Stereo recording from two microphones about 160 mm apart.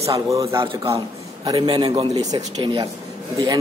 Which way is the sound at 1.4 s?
30° right (ahead or behind).